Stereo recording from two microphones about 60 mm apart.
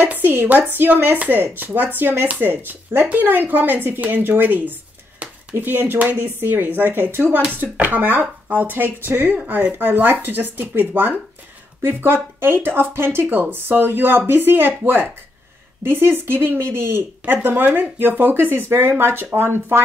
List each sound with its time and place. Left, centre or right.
0.1 s speech: right
17.2 s speech: right